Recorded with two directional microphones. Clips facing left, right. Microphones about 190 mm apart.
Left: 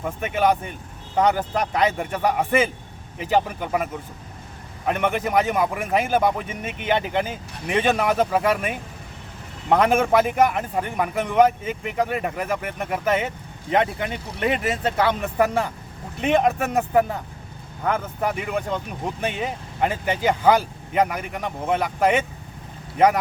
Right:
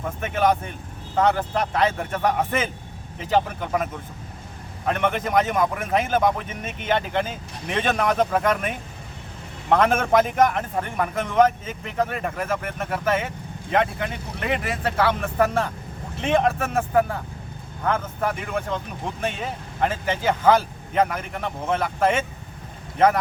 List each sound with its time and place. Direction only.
0.0 s a man's voice: 10° left (ahead or behind)
4.9 s a man's voice: 10° left (ahead or behind)